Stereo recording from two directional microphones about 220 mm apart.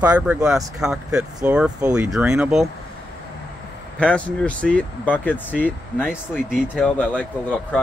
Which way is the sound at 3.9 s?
5° left (ahead or behind).